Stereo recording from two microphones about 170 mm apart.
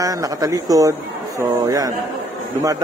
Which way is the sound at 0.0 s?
20° right (ahead or behind).